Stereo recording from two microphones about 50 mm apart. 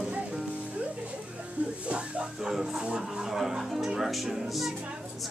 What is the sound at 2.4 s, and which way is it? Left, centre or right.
Speech, centre.